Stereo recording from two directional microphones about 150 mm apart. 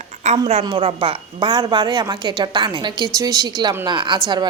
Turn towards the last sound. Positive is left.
turn(degrees=-30)  # may be behind; listen again after turning